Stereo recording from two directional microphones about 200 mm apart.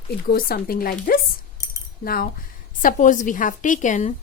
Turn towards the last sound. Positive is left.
turn(degrees=40)  # may be behind; listen again after turning